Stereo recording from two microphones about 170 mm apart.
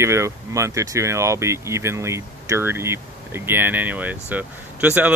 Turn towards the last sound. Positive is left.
turn(degrees=-10)  # may be behind; listen again after turning